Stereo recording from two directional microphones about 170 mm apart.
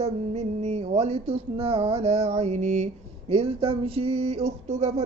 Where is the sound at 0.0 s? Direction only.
40° right (ahead or behind).